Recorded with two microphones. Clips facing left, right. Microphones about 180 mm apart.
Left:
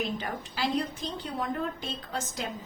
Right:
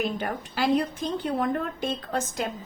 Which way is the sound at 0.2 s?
55° right (ahead or behind).